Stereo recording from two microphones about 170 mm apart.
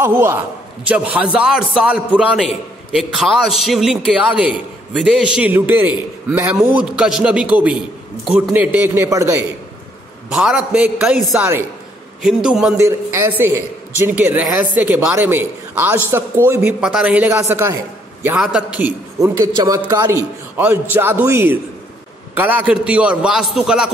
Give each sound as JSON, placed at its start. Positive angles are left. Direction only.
{"t": 0.0, "sound": "a man's voice", "side_deg": -15}
{"t": 10.3, "sound": "a man's voice", "side_deg": -5}
{"t": 12.7, "sound": "a man's voice", "side_deg": -15}